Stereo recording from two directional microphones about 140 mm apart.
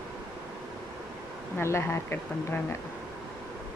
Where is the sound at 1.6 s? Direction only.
20° left (ahead or behind).